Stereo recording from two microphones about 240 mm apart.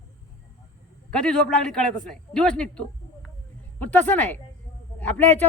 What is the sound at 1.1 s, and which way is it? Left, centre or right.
A woman's voice, centre.